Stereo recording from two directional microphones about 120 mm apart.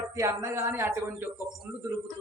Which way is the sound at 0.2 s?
25° right (ahead or behind).